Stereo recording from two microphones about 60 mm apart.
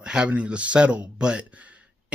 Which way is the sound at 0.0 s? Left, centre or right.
Centre.